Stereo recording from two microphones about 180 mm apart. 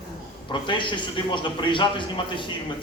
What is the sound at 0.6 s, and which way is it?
A man's voice, 25° left (ahead or behind).